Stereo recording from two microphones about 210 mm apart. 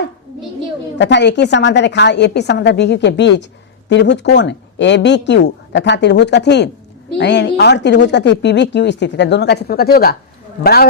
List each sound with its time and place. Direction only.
0.9 s speech: 55° left (ahead or behind)